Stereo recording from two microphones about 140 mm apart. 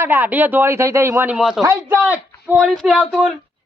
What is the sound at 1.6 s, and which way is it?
A man's voice, 20° right (ahead or behind).